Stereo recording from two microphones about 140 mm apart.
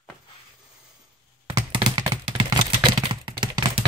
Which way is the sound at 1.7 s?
35° right (ahead or behind).